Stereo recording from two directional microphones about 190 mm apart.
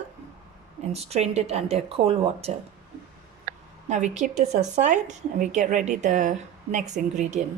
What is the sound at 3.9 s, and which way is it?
A woman's voice, 40° right (ahead or behind).